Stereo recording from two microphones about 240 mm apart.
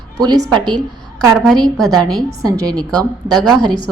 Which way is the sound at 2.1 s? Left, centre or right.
Centre.